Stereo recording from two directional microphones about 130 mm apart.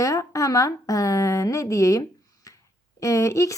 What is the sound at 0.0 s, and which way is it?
A woman's voice, 25° left (ahead or behind).